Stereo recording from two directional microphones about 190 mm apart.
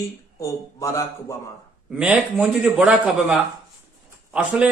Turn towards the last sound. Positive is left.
turn(degrees=-5)  # may be behind; listen again after turning